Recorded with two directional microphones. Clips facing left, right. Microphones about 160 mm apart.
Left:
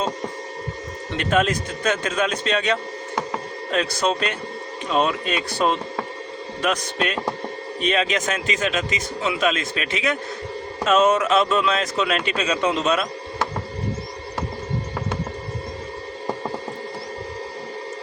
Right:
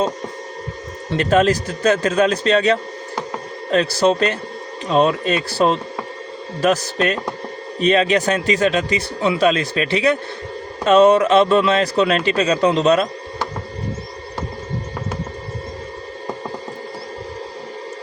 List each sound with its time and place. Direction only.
1.1 s a man's voice: 35° right (ahead or behind)